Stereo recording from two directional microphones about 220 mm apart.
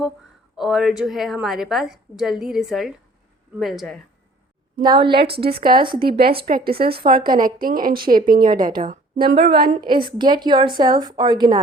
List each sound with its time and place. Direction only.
0.5 s a woman's voice: centre (ahead or behind)
4.8 s a woman's voice: 20° right (ahead or behind)
5.1 s a woman's voice: 45° right (ahead or behind)
9.8 s a woman's voice: 20° right (ahead or behind)